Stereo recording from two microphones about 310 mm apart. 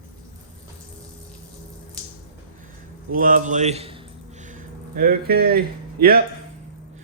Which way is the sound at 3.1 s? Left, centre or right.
Right.